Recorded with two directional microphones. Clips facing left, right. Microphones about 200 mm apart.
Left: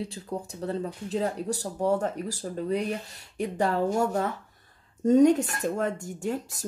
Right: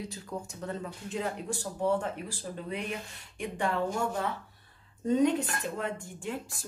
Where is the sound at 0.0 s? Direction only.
30° left (ahead or behind).